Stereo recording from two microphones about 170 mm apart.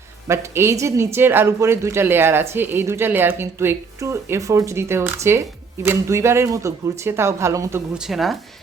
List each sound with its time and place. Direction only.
0.3 s speech: 15° right (ahead or behind)
7.9 s speech: centre (ahead or behind)